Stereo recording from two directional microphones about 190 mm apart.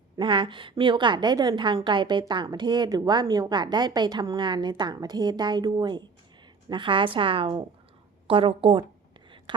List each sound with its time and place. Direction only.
0.2 s a woman's voice: 25° right (ahead or behind)